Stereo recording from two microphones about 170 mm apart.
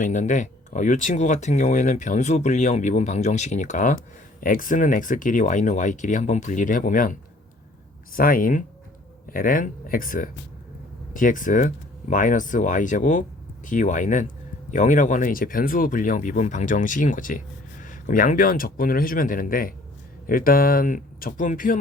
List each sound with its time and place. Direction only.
0.0 s speech: 45° left (ahead or behind)